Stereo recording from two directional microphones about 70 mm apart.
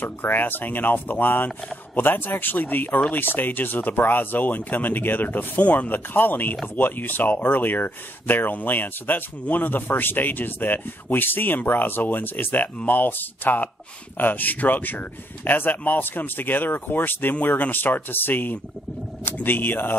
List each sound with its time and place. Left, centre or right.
0.0 s speech: left